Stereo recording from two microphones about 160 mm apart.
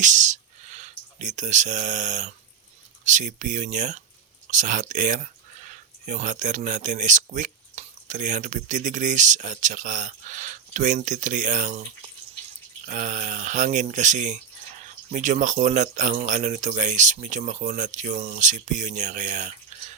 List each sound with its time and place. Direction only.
0.0 s speech: 50° right (ahead or behind)